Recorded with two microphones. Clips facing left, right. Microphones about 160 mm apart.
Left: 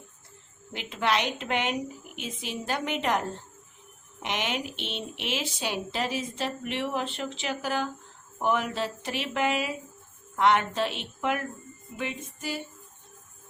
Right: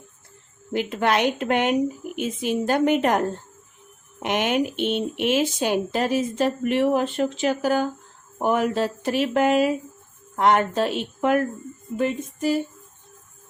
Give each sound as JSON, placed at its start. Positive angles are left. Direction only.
{"t": 0.7, "sound": "speech", "side_deg": -50}
{"t": 11.9, "sound": "female singing", "side_deg": -40}